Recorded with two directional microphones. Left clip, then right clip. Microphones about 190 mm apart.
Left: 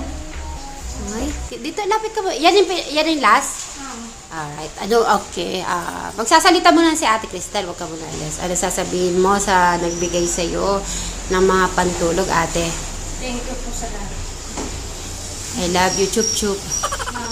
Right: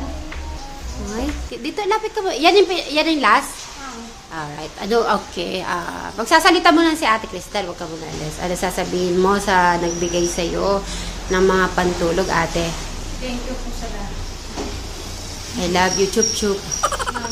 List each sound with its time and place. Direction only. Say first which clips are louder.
1.6 s a woman's voice: left 1 dB; centre (ahead or behind)
15.6 s a woman's voice: even; 5° left (ahead or behind)